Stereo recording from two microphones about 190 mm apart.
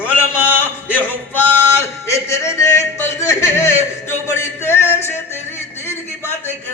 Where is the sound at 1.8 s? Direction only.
15° left (ahead or behind).